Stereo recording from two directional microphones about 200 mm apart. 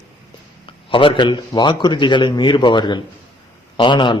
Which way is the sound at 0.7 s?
25° left (ahead or behind).